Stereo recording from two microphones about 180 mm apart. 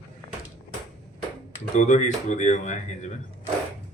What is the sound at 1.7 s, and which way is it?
Speech, 40° left (ahead or behind).